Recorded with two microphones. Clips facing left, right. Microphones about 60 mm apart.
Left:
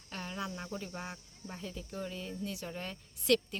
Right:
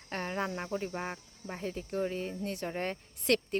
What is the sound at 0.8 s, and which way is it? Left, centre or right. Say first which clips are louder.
Speech: right 6 dB; right.